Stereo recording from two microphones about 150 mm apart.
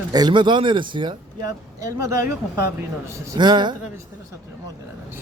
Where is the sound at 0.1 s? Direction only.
30° right (ahead or behind).